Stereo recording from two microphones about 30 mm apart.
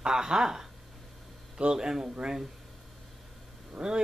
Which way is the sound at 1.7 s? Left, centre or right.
Right.